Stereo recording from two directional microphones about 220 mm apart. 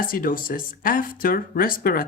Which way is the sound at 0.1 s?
40° left (ahead or behind).